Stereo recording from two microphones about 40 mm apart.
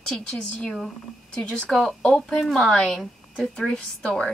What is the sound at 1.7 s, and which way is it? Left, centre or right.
A woman's voice, centre.